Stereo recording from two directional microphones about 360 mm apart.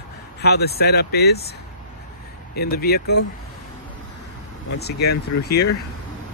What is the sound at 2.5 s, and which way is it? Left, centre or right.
Speech, left.